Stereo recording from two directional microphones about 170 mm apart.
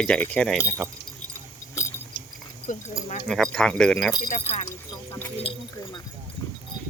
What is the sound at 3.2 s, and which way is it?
Speech, centre (ahead or behind).